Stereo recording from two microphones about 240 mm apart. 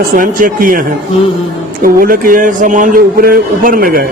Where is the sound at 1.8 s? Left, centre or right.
Right.